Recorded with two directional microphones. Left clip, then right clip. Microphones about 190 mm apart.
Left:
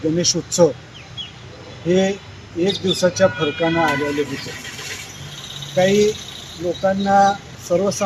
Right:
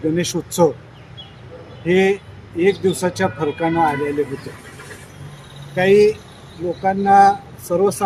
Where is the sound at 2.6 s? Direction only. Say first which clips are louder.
Right 3 dB; 10° right (ahead or behind).